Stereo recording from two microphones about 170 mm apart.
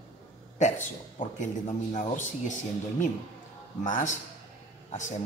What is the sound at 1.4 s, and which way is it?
A man's voice, 45° left (ahead or behind).